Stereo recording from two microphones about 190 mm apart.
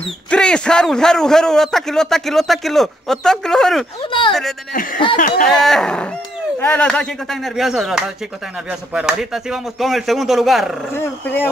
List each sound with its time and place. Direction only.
0.3 s a man's voice: 5° left (ahead or behind)
4.0 s speech: 25° left (ahead or behind)
4.3 s a man's voice: centre (ahead or behind)
5.1 s speech: 45° left (ahead or behind)
5.5 s a man's voice: centre (ahead or behind)
10.9 s speech: 10° left (ahead or behind)